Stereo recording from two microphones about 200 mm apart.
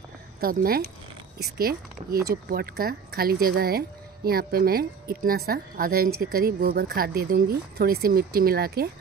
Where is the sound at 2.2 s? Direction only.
50° right (ahead or behind).